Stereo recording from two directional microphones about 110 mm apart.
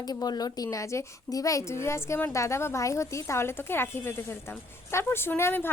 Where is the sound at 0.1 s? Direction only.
35° left (ahead or behind).